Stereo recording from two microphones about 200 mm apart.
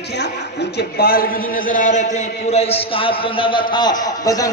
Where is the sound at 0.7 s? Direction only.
50° left (ahead or behind).